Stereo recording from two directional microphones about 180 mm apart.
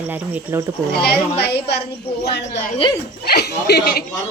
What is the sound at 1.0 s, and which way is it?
Speech, 65° left (ahead or behind).